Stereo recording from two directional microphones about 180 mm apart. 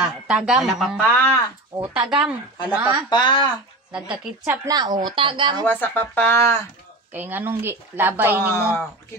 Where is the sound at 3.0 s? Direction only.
25° left (ahead or behind).